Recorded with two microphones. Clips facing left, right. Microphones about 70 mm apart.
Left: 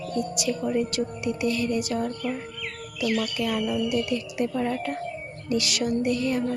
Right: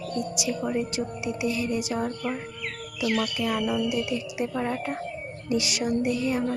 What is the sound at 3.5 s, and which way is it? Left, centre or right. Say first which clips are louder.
Speech: left 1 dB; right.